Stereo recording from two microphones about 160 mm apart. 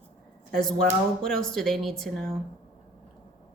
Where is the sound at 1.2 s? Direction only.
5° left (ahead or behind).